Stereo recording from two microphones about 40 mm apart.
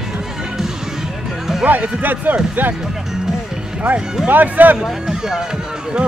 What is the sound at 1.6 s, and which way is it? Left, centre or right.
Speech, right.